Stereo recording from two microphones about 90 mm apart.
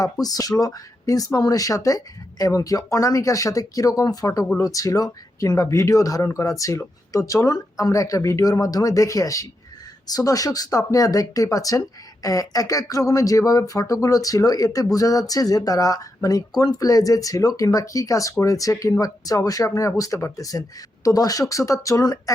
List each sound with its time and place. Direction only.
0.0 s speech: 45° left (ahead or behind)